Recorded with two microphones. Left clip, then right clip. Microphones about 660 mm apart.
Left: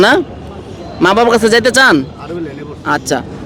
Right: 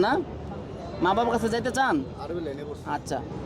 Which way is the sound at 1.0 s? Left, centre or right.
Left.